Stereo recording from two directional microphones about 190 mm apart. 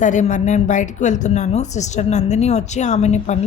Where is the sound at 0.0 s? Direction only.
40° left (ahead or behind).